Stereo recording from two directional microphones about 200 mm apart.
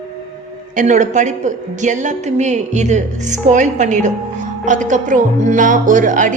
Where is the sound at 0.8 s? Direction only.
40° right (ahead or behind).